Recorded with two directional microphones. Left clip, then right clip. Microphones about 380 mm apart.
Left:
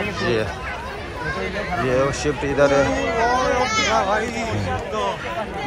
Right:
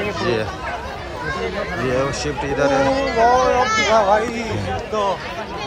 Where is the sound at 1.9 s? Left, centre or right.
Centre.